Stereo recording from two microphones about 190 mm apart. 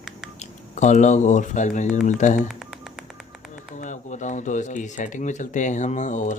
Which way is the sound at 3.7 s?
40° left (ahead or behind).